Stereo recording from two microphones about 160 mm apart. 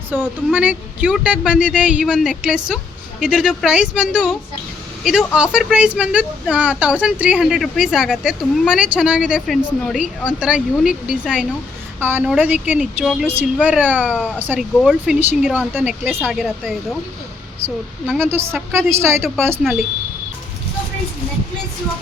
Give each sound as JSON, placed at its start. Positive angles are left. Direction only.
{"t": 0.1, "sound": "speech", "side_deg": -10}
{"t": 14.8, "sound": "speech", "side_deg": 0}
{"t": 17.6, "sound": "speech", "side_deg": -15}